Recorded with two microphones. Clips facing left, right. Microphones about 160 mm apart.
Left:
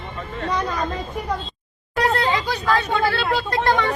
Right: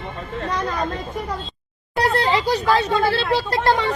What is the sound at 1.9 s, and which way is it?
Speech, 35° right (ahead or behind).